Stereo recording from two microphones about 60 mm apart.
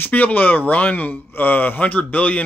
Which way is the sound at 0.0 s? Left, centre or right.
Left.